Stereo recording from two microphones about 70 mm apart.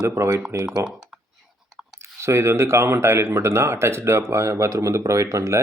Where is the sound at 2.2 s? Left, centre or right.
Right.